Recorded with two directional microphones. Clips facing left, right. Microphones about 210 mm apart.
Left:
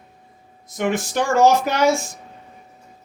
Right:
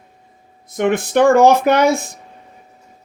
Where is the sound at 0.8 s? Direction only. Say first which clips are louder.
Right 8 dB; 60° right (ahead or behind).